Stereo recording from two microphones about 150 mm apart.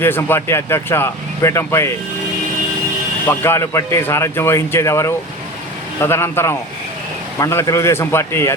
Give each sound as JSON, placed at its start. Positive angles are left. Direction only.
{"t": 0.0, "sound": "a man's voice", "side_deg": 15}
{"t": 3.2, "sound": "a man's voice", "side_deg": 15}